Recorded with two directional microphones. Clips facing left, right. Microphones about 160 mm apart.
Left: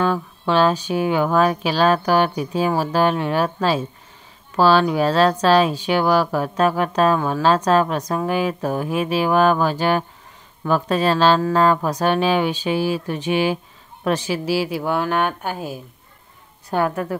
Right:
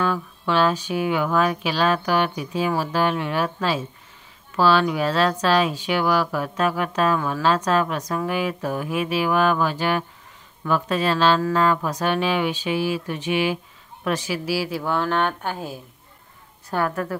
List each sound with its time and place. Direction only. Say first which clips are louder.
0.0 s a woman's voice: left 3 dB; 30° left (ahead or behind); by 15.8 s 5° left (ahead or behind)
16.7 s a woman's voice: left 3 dB; 20° left (ahead or behind)